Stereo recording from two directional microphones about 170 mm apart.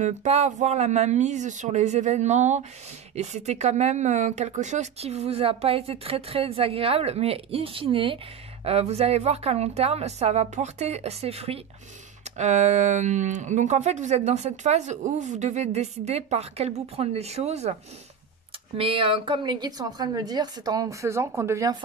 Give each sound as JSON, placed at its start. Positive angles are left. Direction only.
{"t": 0.0, "sound": "speech", "side_deg": -40}
{"t": 18.8, "sound": "a woman's voice", "side_deg": -30}